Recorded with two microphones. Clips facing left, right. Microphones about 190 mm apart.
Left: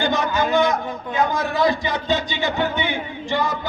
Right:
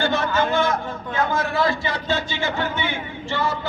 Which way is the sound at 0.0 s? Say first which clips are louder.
Even; 15° left (ahead or behind).